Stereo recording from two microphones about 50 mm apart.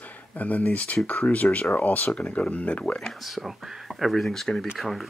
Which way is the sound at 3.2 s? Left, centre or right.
Centre.